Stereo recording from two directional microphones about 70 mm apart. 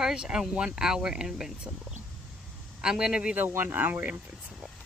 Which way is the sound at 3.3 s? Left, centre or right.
Right.